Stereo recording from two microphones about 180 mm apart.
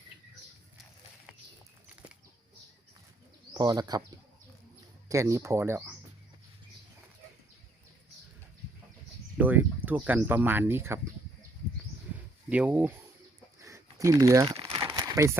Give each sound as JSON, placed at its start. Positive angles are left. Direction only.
{"t": 3.5, "sound": "speech", "side_deg": -25}
{"t": 5.0, "sound": "speech", "side_deg": -15}
{"t": 9.4, "sound": "speech", "side_deg": -10}
{"t": 12.5, "sound": "speech", "side_deg": -10}
{"t": 13.6, "sound": "crumpling", "side_deg": -15}